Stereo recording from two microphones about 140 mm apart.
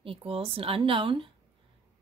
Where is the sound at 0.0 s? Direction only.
40° right (ahead or behind).